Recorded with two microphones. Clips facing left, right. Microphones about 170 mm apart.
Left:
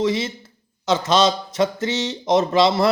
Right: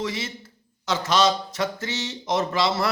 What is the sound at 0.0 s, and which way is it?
Speech, 20° left (ahead or behind).